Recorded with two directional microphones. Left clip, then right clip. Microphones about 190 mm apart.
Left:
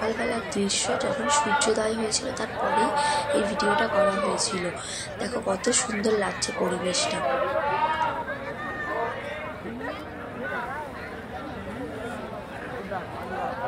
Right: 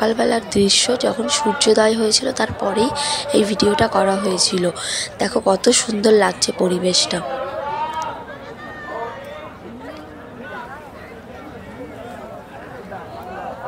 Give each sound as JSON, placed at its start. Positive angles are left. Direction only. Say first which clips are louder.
{"t": 0.0, "sound": "speech", "louder": "right 9 dB", "side_deg": -50}